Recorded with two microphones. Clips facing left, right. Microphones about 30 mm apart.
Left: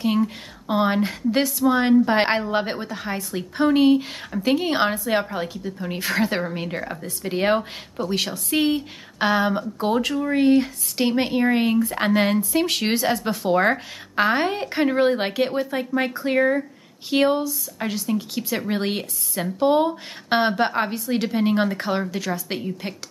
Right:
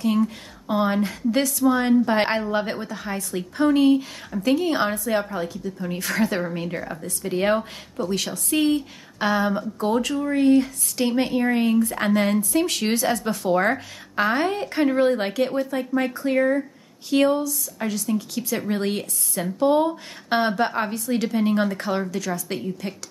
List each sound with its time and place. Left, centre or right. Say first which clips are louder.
0.7 s speech: left 1 dB; left